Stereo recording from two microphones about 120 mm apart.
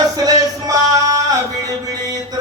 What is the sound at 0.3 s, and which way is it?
Music, 30° right (ahead or behind).